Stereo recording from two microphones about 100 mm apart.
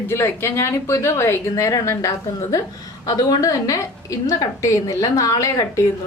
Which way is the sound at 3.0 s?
45° left (ahead or behind).